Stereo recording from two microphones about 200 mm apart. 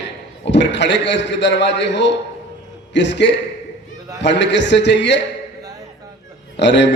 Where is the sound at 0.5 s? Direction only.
60° left (ahead or behind).